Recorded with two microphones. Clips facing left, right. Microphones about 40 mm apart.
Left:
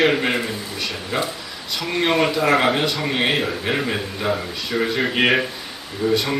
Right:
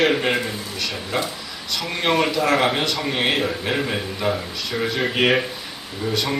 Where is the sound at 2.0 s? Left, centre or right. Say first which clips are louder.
Left 1 dB; centre.